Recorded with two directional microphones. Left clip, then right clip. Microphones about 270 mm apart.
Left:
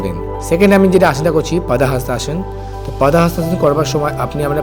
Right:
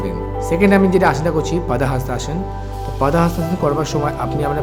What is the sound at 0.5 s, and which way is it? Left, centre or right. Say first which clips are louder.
Speech: left 4 dB; centre.